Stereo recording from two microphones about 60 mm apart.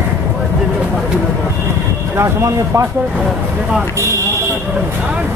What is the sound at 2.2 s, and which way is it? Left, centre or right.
Speech, right.